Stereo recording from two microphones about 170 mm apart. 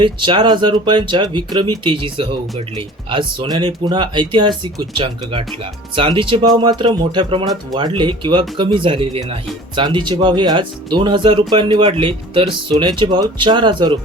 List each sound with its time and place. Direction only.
0.0 s speech: 30° right (ahead or behind)